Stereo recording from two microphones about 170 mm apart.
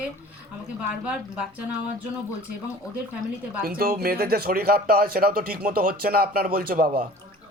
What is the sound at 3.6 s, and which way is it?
Speech, 60° right (ahead or behind).